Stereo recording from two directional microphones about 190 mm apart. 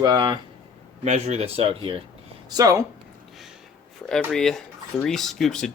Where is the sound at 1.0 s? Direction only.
35° right (ahead or behind).